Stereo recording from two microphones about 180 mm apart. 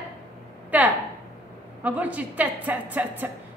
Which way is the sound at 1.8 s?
10° right (ahead or behind).